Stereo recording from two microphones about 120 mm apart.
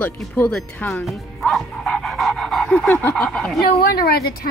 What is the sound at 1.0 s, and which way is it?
Dog, centre (ahead or behind).